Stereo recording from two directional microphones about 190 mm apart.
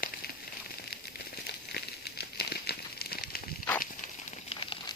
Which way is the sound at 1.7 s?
60° left (ahead or behind).